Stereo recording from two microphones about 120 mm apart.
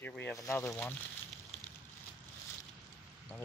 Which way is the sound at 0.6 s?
20° left (ahead or behind).